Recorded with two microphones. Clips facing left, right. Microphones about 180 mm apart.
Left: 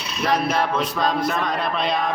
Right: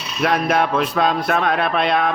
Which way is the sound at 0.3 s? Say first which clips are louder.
Right 3 dB; 65° right (ahead or behind).